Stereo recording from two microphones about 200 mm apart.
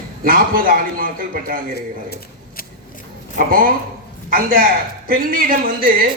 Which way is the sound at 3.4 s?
45° right (ahead or behind).